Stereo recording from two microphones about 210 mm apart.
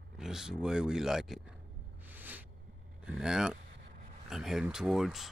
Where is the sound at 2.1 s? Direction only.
10° right (ahead or behind).